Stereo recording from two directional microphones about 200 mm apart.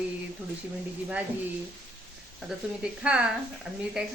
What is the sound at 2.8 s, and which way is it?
Speech, 5° right (ahead or behind).